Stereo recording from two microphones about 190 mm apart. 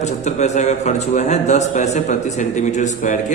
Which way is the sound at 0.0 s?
35° left (ahead or behind).